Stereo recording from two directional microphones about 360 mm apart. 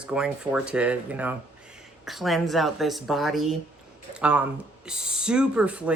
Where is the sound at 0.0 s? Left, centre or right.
Centre.